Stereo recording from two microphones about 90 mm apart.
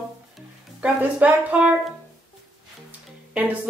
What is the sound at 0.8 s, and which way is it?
Speech, 15° right (ahead or behind).